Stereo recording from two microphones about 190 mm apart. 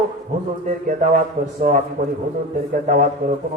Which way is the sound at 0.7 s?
45° right (ahead or behind).